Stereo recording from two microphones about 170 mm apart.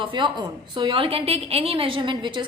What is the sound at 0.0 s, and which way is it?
A woman's voice, 30° right (ahead or behind).